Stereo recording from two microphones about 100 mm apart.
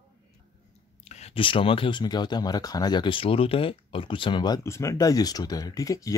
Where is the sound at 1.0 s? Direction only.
90° left; by 4.6 s 50° left (ahead or behind).